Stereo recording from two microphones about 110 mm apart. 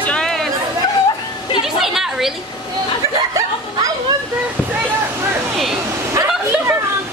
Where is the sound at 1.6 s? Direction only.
5° right (ahead or behind).